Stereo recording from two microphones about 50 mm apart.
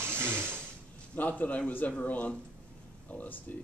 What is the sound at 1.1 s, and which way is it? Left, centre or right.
Speech, left.